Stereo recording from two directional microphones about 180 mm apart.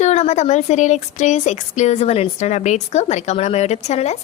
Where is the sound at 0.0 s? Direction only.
40° left (ahead or behind).